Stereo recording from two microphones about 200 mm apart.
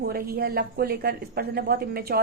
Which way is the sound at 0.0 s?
50° right (ahead or behind).